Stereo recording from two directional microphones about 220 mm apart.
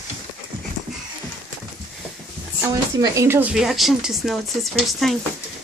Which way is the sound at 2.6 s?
15° right (ahead or behind).